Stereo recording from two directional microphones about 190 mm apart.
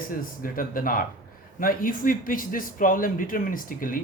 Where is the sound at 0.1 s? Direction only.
45° left (ahead or behind).